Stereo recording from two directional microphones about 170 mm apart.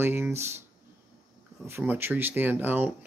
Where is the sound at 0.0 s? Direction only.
15° right (ahead or behind).